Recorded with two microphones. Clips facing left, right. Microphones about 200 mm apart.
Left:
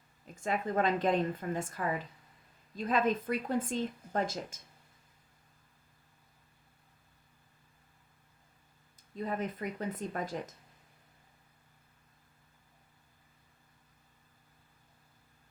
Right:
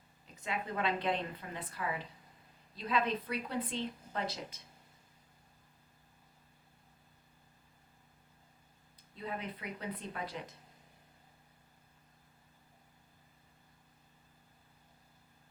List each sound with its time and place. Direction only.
0.3 s speech: 45° left (ahead or behind)
9.1 s speech: 45° left (ahead or behind)